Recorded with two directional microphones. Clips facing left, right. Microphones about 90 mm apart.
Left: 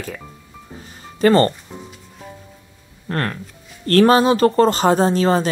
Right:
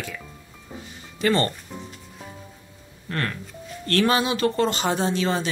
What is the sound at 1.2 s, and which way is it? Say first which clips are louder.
Speech: left 8 dB; 40° left (ahead or behind).